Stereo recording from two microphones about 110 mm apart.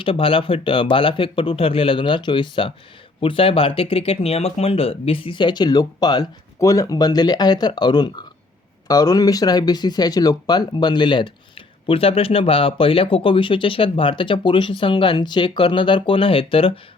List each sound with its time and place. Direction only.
0.0 s speech: 55° left (ahead or behind)